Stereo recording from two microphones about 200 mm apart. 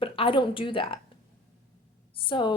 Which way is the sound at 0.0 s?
25° left (ahead or behind).